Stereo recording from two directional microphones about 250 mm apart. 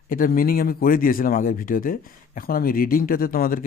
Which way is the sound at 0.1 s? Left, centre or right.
Left.